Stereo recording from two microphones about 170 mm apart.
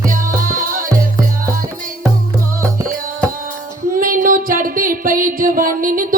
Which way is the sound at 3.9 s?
55° right (ahead or behind).